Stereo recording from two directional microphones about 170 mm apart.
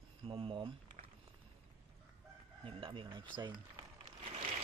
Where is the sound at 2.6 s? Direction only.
30° right (ahead or behind).